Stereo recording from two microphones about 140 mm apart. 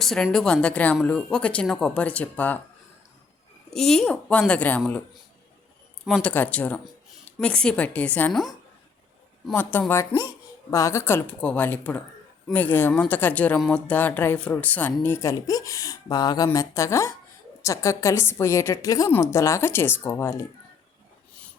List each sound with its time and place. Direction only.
0.0 s speech: centre (ahead or behind)
3.7 s speech: 5° left (ahead or behind)
6.1 s speech: 5° left (ahead or behind)
9.5 s speech: 15° left (ahead or behind)